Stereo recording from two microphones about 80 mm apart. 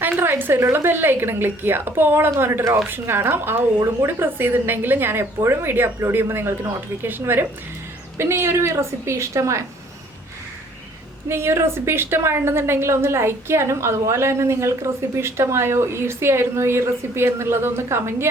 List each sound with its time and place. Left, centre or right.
0.2 s a woman's voice: right
11.3 s a woman's voice: right